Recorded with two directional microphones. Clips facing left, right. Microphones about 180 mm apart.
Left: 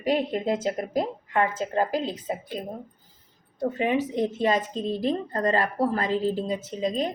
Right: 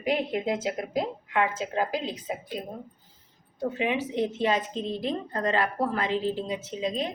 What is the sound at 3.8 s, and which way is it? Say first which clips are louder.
A woman's voice: left 3 dB; 45° left (ahead or behind).